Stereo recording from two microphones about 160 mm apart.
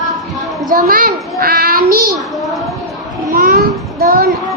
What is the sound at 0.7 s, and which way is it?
A child's voice, 65° right (ahead or behind).